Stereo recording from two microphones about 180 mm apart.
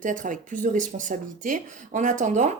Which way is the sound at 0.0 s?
45° right (ahead or behind).